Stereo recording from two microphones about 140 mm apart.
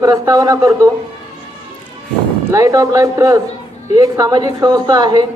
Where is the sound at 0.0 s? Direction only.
25° right (ahead or behind).